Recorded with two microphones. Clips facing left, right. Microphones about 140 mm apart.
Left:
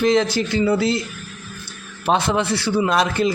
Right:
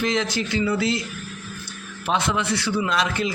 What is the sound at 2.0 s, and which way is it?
A man's voice, 35° left (ahead or behind).